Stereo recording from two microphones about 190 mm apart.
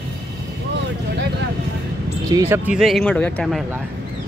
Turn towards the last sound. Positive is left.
turn(degrees=5)  # may be behind; listen again after turning